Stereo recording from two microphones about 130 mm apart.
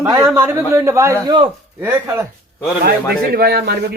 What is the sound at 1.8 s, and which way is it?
Speech, 20° right (ahead or behind).